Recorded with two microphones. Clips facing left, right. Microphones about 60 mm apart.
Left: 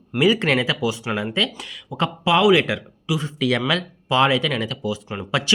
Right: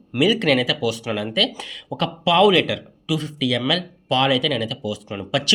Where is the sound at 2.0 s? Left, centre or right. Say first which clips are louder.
Right 2 dB; centre.